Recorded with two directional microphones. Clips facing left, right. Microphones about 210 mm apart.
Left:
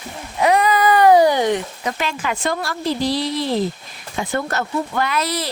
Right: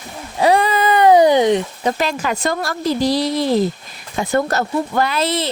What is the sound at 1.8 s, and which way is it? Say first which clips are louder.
A woman's voice: right 5 dB; 35° right (ahead or behind).